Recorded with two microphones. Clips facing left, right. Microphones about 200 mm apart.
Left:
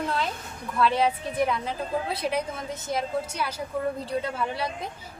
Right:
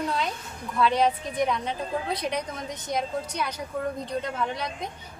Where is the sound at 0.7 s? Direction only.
Centre (ahead or behind).